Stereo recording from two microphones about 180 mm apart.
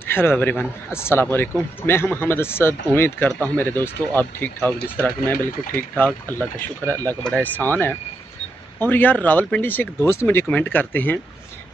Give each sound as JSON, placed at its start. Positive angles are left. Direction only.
{"t": 0.0, "sound": "speech", "side_deg": 10}